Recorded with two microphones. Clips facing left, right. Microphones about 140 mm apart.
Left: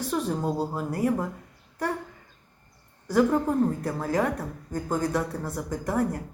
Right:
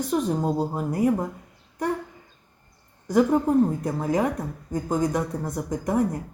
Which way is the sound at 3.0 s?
15° right (ahead or behind).